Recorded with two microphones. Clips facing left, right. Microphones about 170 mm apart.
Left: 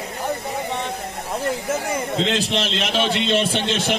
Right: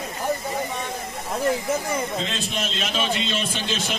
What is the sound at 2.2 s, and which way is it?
Speech, 75° left (ahead or behind).